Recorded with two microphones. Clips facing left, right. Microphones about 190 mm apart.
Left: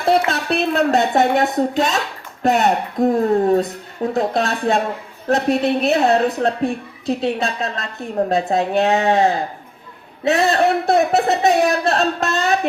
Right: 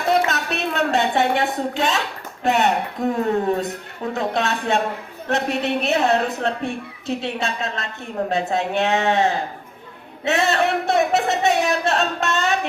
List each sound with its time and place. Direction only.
0.3 s speech: 30° left (ahead or behind)